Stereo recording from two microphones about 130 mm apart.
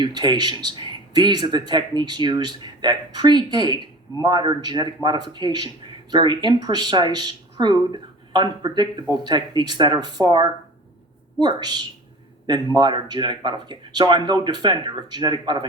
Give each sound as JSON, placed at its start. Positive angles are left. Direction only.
{"t": 0.0, "sound": "speech", "side_deg": -35}
{"t": 12.7, "sound": "speech", "side_deg": -35}